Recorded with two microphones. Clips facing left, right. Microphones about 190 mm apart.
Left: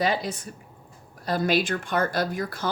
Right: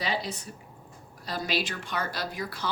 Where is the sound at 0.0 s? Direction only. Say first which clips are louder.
Left 6 dB; 50° left (ahead or behind).